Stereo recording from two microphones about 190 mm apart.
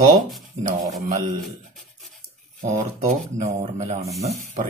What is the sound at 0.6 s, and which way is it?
Speech, 40° right (ahead or behind).